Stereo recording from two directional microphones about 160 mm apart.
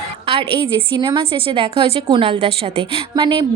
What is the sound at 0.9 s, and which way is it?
A woman's voice, 30° right (ahead or behind).